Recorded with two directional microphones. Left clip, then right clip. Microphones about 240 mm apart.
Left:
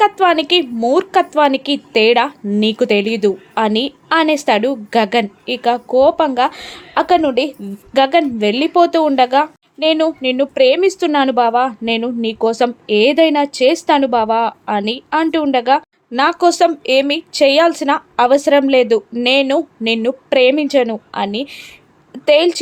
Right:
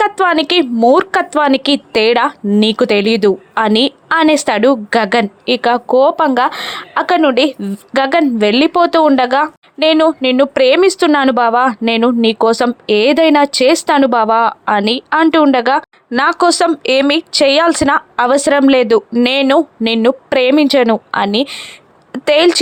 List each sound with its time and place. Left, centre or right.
0.0 s a woman's voice: centre